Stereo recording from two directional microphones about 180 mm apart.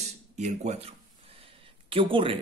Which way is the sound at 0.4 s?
40° right (ahead or behind).